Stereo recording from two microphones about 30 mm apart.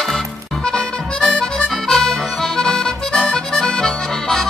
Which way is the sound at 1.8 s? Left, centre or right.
Centre.